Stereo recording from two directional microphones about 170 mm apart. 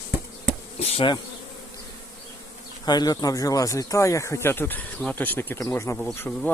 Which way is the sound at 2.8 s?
25° left (ahead or behind).